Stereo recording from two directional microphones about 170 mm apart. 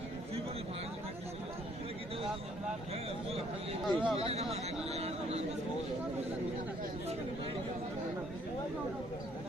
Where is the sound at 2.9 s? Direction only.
35° right (ahead or behind).